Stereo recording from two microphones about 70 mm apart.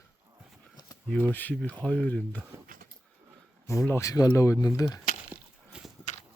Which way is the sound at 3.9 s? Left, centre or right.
Left.